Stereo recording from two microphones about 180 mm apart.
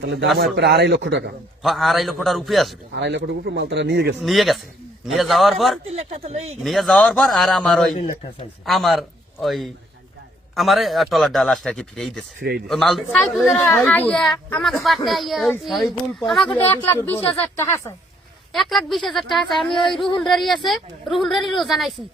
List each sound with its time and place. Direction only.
0.0 s a man's voice: 80° right
1.6 s speech: centre (ahead or behind)
2.9 s speech: 75° right (ahead or behind)
4.2 s speech: centre (ahead or behind)
5.9 s speech: 35° right (ahead or behind)
6.6 s speech: centre (ahead or behind)
12.4 s speech: 60° right (ahead or behind)
12.6 s speech: centre (ahead or behind)
16.6 s speech: 10° left (ahead or behind)
18.5 s speech: centre (ahead or behind)